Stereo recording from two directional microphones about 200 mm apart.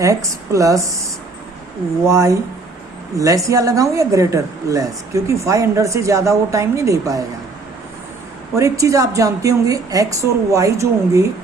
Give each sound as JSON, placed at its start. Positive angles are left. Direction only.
{"t": 0.0, "sound": "a woman's voice", "side_deg": -15}
{"t": 2.0, "sound": "a woman's voice", "side_deg": -15}
{"t": 8.5, "sound": "a woman's voice", "side_deg": -15}